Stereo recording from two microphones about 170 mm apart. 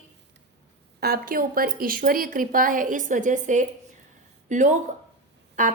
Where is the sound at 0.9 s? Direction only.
65° right (ahead or behind).